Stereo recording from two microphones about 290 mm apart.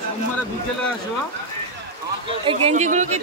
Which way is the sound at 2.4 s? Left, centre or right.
Centre.